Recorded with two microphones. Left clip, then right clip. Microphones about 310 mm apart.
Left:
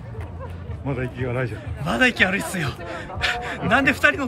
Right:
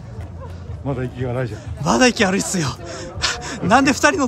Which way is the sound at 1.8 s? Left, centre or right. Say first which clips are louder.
Right 3 dB; centre.